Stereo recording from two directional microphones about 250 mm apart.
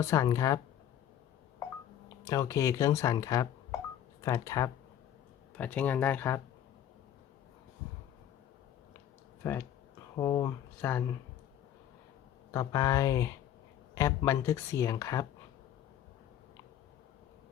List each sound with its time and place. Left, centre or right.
0.0 s speech: centre
2.2 s speech: centre
9.4 s speech: centre
12.5 s speech: centre